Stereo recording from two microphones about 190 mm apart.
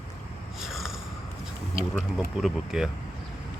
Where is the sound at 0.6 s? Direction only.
Centre (ahead or behind).